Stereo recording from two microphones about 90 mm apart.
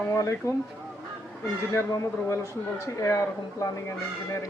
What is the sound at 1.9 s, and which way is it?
A man's voice, 30° left (ahead or behind).